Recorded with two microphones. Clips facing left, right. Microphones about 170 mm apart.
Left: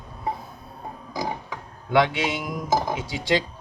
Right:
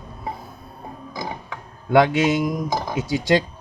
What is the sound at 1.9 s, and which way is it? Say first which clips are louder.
Speech: right 5 dB; 45° right (ahead or behind).